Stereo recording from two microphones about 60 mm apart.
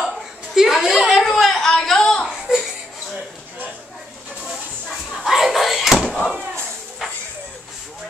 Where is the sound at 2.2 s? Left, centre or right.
Centre.